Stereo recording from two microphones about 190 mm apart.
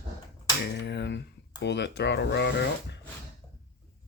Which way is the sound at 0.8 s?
65° left (ahead or behind).